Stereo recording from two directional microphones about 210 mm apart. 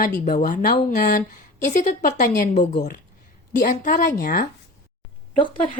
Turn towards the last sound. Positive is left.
turn(degrees=25)  # may be behind; listen again after turning